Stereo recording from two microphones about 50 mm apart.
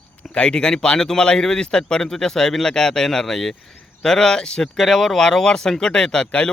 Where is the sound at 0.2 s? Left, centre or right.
Left.